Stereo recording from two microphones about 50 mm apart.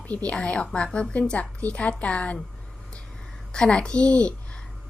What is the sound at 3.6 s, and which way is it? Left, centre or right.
Speech, centre.